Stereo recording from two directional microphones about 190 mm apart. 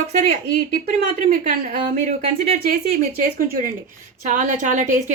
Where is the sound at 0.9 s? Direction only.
45° right (ahead or behind).